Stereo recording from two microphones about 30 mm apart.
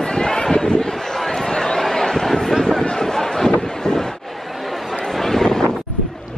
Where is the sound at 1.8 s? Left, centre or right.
Centre.